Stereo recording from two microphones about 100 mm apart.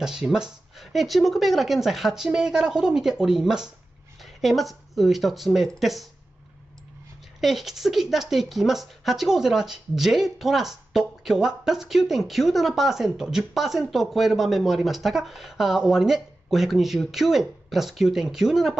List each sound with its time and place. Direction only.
0.0 s speech: 5° right (ahead or behind)
7.3 s speech: centre (ahead or behind)